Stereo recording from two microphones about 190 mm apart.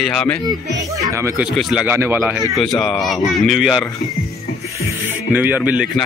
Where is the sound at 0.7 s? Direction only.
15° right (ahead or behind).